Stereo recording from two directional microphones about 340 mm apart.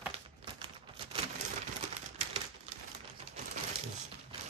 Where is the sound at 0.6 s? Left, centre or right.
Centre.